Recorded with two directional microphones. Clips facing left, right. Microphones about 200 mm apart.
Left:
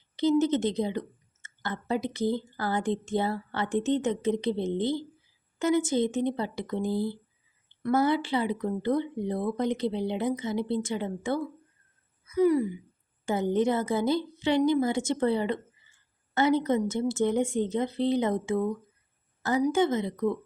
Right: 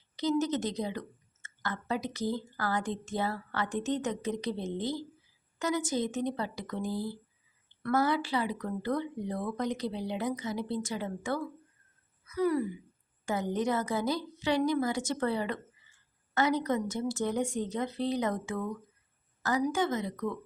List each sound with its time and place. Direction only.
0.2 s a woman's voice: 25° left (ahead or behind)